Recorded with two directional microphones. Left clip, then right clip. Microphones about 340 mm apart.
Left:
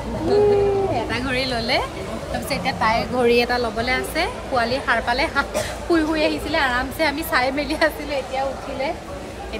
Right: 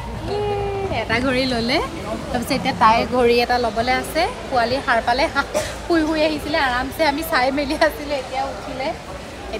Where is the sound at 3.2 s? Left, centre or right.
Centre.